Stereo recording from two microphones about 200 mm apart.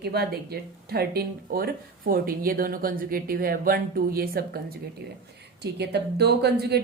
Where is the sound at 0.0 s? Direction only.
50° right (ahead or behind).